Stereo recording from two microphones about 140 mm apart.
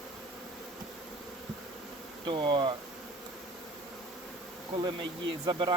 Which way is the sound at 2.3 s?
35° right (ahead or behind).